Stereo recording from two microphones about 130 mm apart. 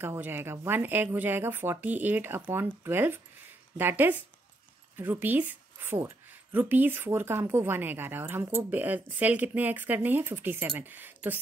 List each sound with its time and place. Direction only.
0.0 s a woman's voice: 15° right (ahead or behind)